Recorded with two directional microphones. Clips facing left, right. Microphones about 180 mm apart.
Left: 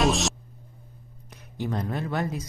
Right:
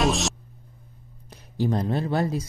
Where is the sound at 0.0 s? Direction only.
Centre (ahead or behind).